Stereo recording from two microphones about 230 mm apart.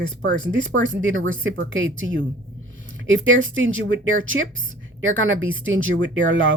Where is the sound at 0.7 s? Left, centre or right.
Right.